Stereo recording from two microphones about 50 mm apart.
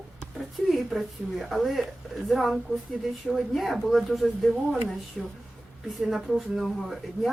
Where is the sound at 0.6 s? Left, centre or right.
Centre.